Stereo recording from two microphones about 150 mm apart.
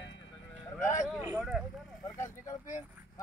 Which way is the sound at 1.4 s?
Centre (ahead or behind).